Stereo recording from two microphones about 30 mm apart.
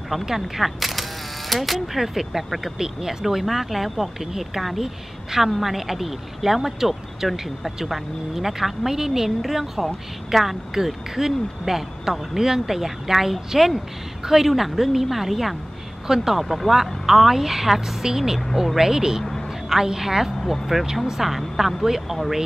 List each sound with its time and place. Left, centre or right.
0.2 s a woman's voice: centre
16.4 s speech: centre
19.2 s a sound: centre
19.7 s speech: centre